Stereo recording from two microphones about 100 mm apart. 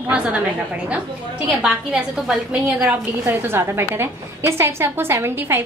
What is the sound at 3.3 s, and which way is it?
A woman's voice, 20° right (ahead or behind).